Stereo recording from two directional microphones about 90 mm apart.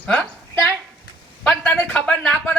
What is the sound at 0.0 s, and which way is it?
Speech, 15° left (ahead or behind).